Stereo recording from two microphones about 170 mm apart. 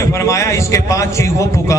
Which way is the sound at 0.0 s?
15° left (ahead or behind).